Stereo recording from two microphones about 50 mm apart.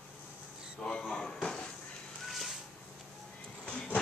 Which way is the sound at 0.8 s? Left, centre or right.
Centre.